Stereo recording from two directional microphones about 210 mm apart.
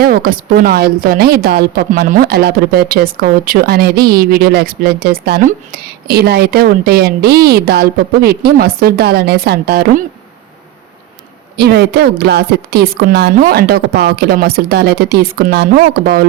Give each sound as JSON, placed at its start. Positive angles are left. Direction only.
{"t": 0.0, "sound": "a woman's voice", "side_deg": -45}
{"t": 11.5, "sound": "a woman's voice", "side_deg": -50}